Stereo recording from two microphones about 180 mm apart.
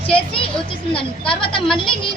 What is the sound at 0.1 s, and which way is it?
Speech, 30° left (ahead or behind).